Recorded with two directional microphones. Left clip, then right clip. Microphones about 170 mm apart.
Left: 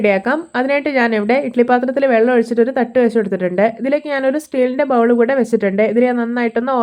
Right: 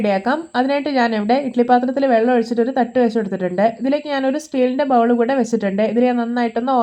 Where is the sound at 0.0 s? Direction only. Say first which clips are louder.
Left 3 dB; 25° left (ahead or behind).